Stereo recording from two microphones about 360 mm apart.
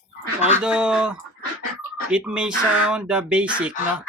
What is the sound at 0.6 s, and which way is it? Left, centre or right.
Speech, centre.